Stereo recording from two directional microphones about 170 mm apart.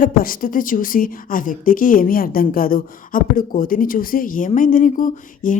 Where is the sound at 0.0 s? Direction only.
55° left (ahead or behind).